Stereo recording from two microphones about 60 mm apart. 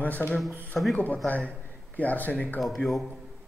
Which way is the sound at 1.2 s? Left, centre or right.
Left.